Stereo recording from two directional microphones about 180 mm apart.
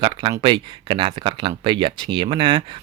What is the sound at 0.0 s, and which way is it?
Speech, 30° right (ahead or behind).